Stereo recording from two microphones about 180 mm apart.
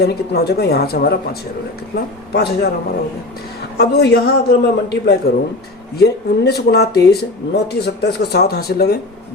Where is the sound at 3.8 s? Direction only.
65° left (ahead or behind).